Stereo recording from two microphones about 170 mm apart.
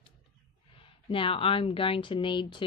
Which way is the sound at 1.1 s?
30° left (ahead or behind).